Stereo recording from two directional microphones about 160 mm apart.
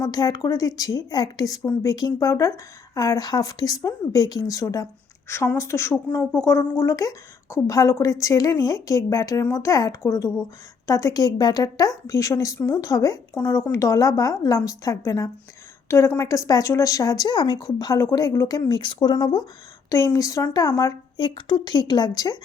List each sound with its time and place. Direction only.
0.0 s a woman's voice: 25° left (ahead or behind)